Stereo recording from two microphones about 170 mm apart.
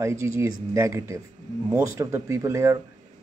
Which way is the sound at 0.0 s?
15° right (ahead or behind).